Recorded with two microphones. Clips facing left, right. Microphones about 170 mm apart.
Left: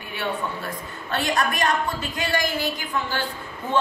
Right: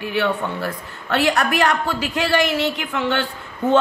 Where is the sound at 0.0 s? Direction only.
75° right (ahead or behind).